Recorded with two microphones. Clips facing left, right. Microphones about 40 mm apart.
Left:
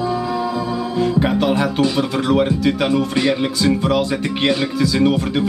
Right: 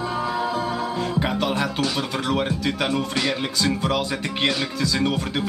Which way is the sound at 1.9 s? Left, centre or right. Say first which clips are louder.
Left 7 dB; centre.